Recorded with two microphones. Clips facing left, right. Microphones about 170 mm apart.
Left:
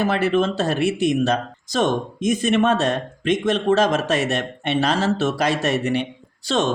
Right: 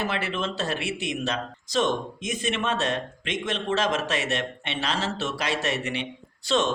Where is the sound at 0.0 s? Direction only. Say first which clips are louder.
Left 9 dB; 40° left (ahead or behind).